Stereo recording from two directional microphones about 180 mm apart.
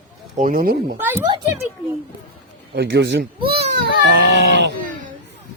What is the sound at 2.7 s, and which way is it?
Speech, 85° right.